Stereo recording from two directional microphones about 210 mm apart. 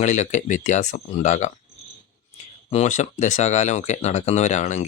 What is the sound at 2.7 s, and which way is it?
Speech, 35° left (ahead or behind).